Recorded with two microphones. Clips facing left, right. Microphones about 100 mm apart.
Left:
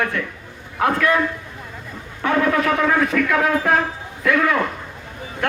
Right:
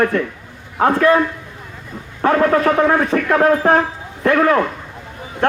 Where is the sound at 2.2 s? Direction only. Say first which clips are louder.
Right 5 dB; 40° right (ahead or behind).